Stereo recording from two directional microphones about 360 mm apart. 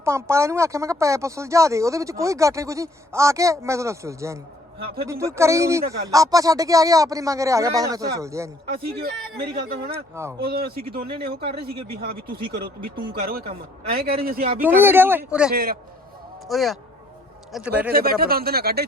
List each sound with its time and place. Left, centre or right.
0.0 s speech: centre
8.9 s a man's voice: right
9.9 s speech: centre
10.4 s a man's voice: right
13.1 s a man's voice: right
14.6 s speech: centre
15.5 s a man's voice: right
16.5 s speech: centre
17.9 s a man's voice: right